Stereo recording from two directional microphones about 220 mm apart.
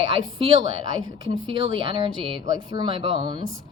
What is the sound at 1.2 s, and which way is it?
A woman's voice, 20° right (ahead or behind).